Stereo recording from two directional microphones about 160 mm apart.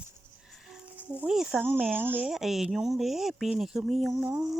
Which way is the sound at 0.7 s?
10° right (ahead or behind).